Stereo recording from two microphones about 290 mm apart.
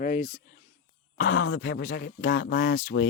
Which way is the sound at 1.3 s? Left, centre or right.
Left.